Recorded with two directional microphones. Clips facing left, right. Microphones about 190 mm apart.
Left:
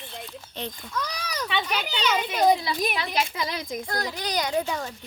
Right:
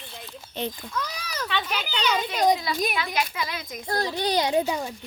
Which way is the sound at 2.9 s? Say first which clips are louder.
Even; 30° left (ahead or behind).